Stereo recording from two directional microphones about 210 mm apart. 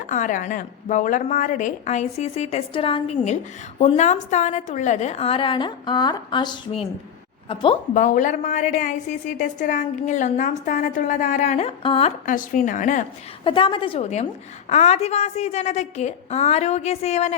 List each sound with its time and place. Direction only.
0.1 s a woman's voice: 35° left (ahead or behind)
7.9 s a woman's voice: 35° left (ahead or behind)
12.2 s a woman's voice: 40° left (ahead or behind)
13.4 s a woman's voice: 25° left (ahead or behind)